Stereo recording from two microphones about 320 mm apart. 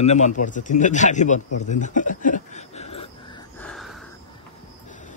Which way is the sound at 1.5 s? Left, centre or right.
Left.